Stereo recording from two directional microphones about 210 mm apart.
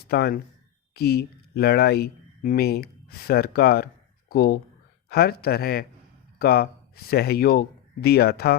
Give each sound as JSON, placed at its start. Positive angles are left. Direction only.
{"t": 0.1, "sound": "speech", "side_deg": 50}